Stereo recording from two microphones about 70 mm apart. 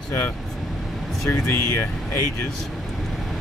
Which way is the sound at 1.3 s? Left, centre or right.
Left.